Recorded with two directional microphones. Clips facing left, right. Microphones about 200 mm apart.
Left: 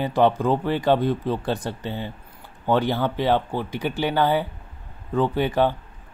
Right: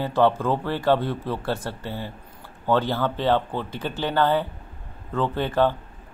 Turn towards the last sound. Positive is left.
turn(degrees=15)  # may be behind; listen again after turning